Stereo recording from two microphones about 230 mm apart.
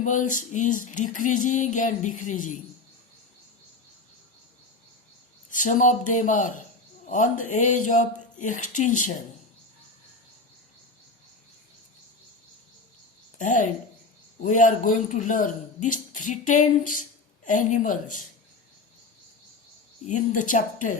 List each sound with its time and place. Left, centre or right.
0.3 s speech: left
5.5 s speech: left
13.4 s speech: left
20.1 s speech: left